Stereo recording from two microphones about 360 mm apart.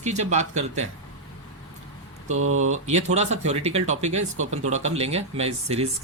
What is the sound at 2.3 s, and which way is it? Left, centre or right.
Speech, right.